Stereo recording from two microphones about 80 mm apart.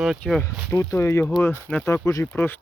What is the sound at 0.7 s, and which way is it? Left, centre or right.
Speech, left.